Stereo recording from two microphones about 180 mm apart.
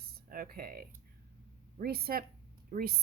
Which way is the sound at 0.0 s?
55° right (ahead or behind).